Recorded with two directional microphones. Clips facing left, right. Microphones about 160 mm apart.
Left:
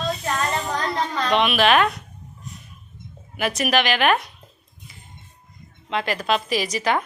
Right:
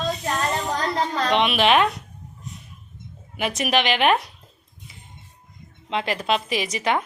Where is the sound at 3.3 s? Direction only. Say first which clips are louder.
Left 1 dB; 20° right (ahead or behind).